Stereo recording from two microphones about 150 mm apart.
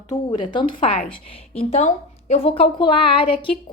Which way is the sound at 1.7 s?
45° left (ahead or behind).